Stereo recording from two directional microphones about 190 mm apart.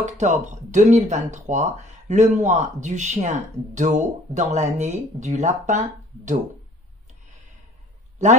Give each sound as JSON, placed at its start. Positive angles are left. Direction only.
{"t": 0.0, "sound": "speech", "side_deg": -40}